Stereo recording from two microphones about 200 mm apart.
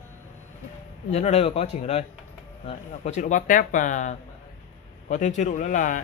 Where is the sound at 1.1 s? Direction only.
35° left (ahead or behind).